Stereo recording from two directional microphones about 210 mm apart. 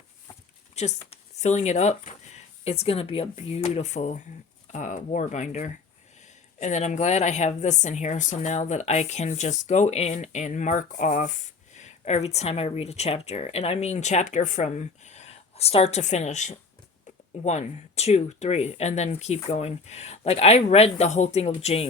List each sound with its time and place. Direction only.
0.8 s a woman's voice: 30° left (ahead or behind)